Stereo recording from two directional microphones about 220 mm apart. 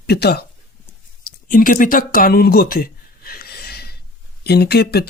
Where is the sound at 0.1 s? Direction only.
45° left (ahead or behind).